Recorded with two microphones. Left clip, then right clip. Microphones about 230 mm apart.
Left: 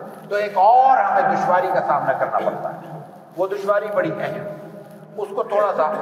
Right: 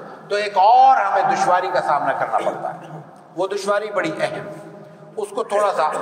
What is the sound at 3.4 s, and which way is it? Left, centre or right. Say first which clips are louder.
A man's voice: left 1 dB; right.